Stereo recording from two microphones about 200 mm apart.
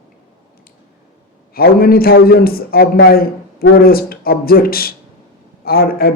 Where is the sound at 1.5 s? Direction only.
50° left (ahead or behind).